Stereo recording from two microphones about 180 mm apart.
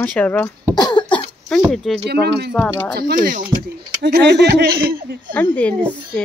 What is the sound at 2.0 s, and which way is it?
Speech, 65° right (ahead or behind).